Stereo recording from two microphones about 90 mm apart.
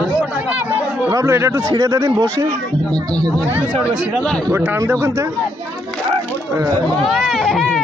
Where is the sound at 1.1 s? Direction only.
30° right (ahead or behind).